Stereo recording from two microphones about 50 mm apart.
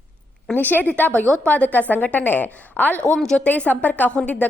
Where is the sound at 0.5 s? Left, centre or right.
Left.